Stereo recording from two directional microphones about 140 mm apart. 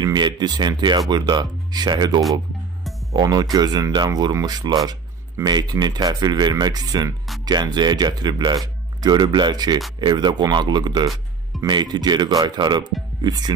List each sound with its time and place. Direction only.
0.0 s speech: 30° right (ahead or behind)